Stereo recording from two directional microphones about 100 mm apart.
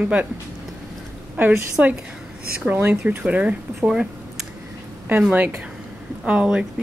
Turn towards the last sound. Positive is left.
turn(degrees=-10)  # may be behind; listen again after turning